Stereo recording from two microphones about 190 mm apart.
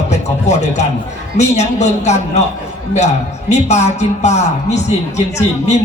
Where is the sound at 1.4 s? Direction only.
35° left (ahead or behind).